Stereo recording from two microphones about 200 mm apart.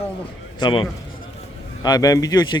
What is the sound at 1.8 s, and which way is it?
Speech, 20° left (ahead or behind).